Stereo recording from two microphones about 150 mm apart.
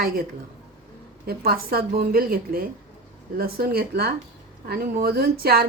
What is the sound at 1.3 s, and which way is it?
A woman's voice, 90° right.